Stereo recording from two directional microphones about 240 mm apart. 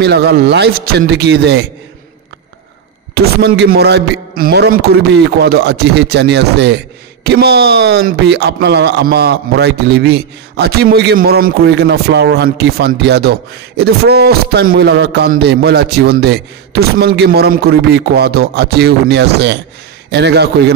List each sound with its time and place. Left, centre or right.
0.0 s speech: right
3.2 s speech: right